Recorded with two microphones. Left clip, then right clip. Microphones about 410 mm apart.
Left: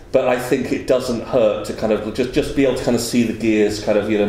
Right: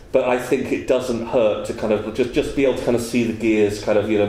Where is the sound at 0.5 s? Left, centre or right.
Left.